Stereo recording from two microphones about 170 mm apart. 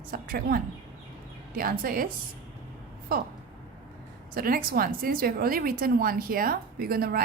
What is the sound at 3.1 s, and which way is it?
Speech, 60° right (ahead or behind).